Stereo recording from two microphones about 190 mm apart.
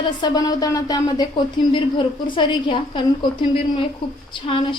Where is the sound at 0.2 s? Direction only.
20° left (ahead or behind).